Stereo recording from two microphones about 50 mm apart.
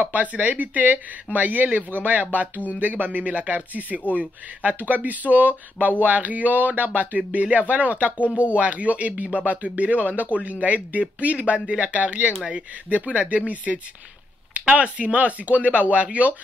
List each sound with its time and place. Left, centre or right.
0.0 s speech: right